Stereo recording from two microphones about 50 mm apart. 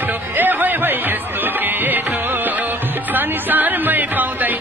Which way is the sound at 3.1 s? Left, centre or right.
Right.